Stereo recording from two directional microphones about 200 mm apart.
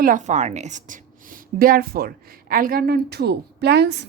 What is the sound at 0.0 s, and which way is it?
A woman's voice, 40° right (ahead or behind).